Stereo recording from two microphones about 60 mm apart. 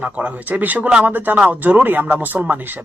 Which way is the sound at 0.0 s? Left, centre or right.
Right.